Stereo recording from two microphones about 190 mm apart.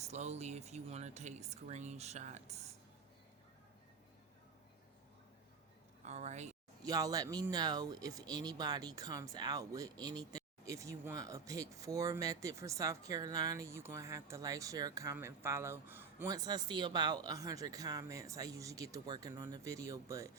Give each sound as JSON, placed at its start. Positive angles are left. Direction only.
{"t": 0.0, "sound": "speech", "side_deg": -35}
{"t": 6.1, "sound": "speech", "side_deg": -35}
{"t": 6.8, "sound": "speech", "side_deg": -20}